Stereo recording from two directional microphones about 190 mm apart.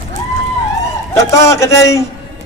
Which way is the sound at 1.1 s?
15° left (ahead or behind).